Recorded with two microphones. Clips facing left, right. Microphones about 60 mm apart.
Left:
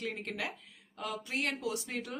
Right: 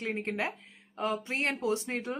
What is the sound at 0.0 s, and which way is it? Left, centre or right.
A woman's voice, right.